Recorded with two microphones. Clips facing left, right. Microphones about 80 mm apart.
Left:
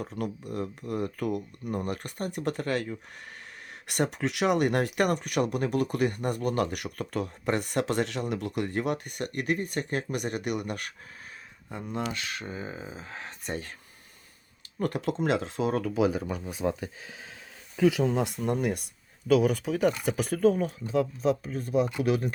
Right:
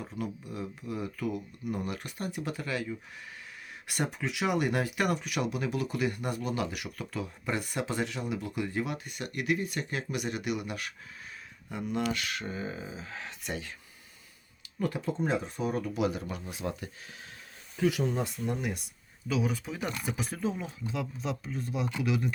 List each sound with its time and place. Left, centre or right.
0.0 s speech: left
11.7 s speech: left
14.8 s speech: left
15.0 s speech: left
17.7 s speech: left
20.8 s speech: left